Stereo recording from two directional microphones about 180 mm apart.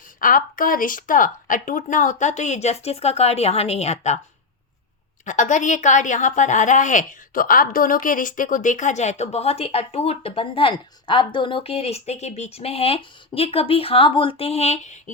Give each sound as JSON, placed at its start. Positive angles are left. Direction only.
{"t": 0.2, "sound": "a woman's voice", "side_deg": 50}
{"t": 5.2, "sound": "a woman's voice", "side_deg": 45}